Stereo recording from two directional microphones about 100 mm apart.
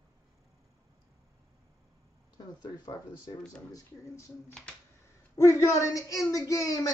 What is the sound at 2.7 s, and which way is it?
Speech, 40° left (ahead or behind).